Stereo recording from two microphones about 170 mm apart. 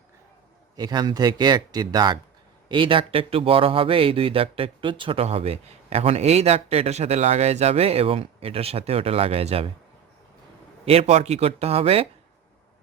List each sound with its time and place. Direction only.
0.8 s speech: 25° right (ahead or behind)
10.8 s speech: 35° right (ahead or behind)